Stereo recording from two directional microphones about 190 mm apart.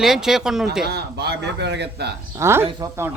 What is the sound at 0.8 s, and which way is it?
Speech, 60° right (ahead or behind).